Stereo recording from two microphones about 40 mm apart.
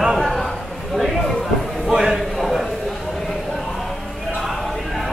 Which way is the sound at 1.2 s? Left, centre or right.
Centre.